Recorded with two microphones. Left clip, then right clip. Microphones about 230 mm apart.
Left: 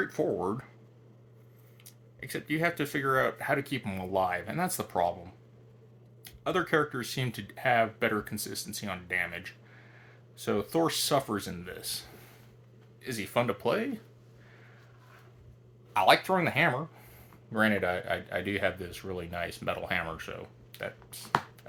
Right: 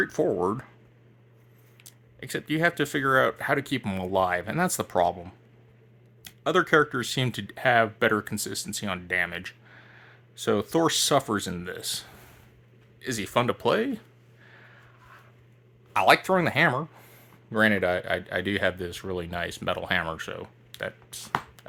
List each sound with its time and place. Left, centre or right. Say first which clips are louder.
0.0 s speech: right 5 dB; right
1.8 s speech: right 2 dB; right
15.9 s speech: right 3 dB; right
21.6 s a sound: right 3 dB; right